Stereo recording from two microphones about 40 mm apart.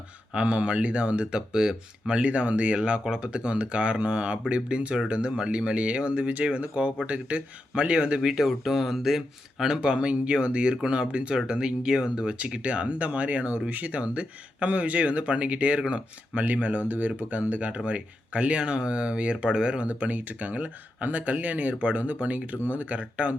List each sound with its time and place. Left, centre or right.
0.3 s speech: right
8.3 s speech: centre
9.7 s speech: right
19.9 s speech: right